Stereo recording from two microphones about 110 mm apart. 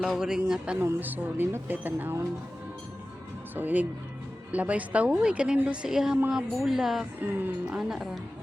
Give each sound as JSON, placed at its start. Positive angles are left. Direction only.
{"t": 0.0, "sound": "speech", "side_deg": -5}
{"t": 0.8, "sound": "speech", "side_deg": -20}
{"t": 3.5, "sound": "a woman's voice", "side_deg": -15}
{"t": 7.2, "sound": "a woman's voice", "side_deg": -15}
{"t": 7.8, "sound": "speech", "side_deg": -5}